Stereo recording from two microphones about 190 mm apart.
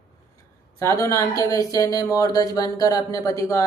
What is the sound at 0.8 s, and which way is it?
Speech, 15° left (ahead or behind).